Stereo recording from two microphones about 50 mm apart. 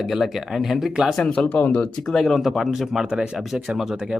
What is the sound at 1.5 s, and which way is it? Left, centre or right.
Speech, left.